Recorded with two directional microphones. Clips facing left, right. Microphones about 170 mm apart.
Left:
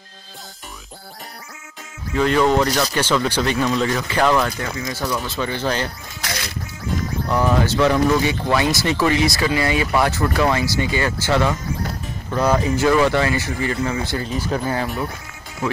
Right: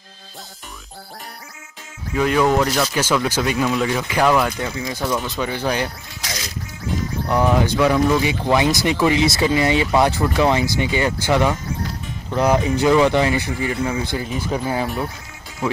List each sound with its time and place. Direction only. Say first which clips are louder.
2.1 s speech: even; 5° right (ahead or behind)
6.2 s music: left 2 dB; 60° left (ahead or behind)
7.2 s speech: right 1 dB; 15° right (ahead or behind)